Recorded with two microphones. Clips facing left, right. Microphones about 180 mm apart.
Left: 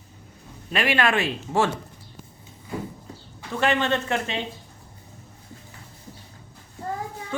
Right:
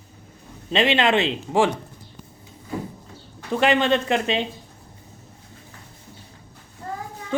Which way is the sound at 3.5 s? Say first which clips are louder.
Right 4 dB; 15° right (ahead or behind).